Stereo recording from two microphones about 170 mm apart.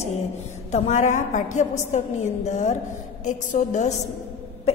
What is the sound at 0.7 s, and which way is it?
A woman's voice, 45° left (ahead or behind).